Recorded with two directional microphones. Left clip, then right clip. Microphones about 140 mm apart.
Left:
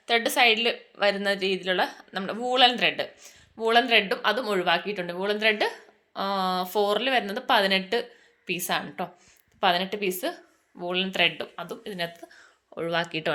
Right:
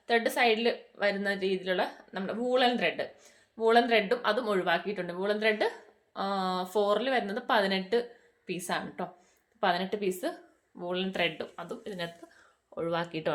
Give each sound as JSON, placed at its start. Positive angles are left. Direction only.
{"t": 0.0, "sound": "a woman's voice", "side_deg": 20}
{"t": 12.7, "sound": "speech", "side_deg": 15}